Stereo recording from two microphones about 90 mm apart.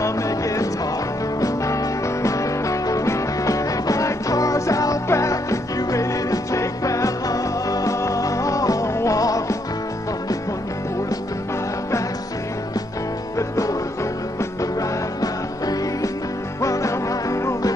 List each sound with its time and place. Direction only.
1.4 s music: 35° left (ahead or behind)
15.6 s music: 45° left (ahead or behind)